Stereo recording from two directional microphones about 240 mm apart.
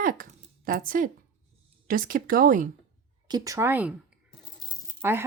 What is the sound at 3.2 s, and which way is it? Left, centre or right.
Speech, centre.